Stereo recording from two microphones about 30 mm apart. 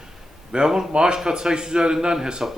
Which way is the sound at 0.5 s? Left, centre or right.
Right.